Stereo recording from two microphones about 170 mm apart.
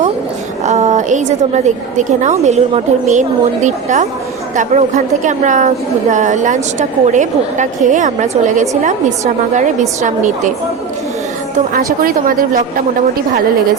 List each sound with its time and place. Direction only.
0.6 s a woman's voice: 40° right (ahead or behind)
12.0 s a woman's voice: 55° right (ahead or behind)